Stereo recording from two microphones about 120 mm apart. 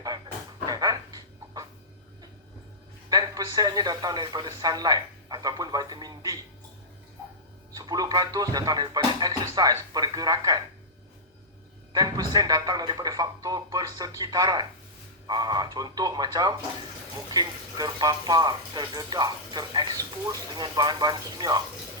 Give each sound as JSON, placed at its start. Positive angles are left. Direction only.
{"t": 0.7, "sound": "a sound", "side_deg": -35}
{"t": 3.1, "sound": "speech", "side_deg": -30}
{"t": 7.8, "sound": "speech", "side_deg": -30}
{"t": 11.9, "sound": "speech", "side_deg": -30}